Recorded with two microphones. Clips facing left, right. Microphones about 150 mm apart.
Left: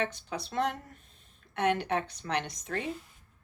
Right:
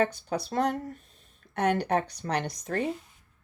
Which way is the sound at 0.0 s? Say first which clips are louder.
Right 6 dB; 40° right (ahead or behind).